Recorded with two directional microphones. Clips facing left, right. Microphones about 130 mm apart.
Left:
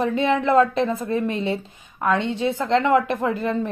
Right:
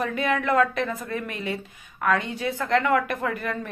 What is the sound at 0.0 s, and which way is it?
A woman's voice, 25° left (ahead or behind).